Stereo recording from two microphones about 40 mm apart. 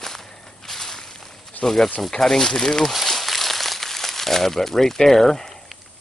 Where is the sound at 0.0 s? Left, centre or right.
Centre.